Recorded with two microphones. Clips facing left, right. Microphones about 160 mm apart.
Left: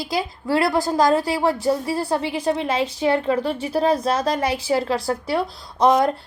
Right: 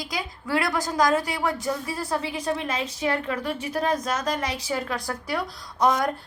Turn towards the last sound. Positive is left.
turn(degrees=30)  # may be behind; listen again after turning